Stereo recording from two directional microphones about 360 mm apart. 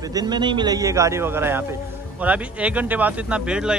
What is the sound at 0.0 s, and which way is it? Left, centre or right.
A man's voice, centre.